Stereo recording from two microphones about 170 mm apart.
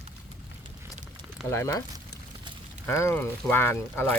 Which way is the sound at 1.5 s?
20° left (ahead or behind).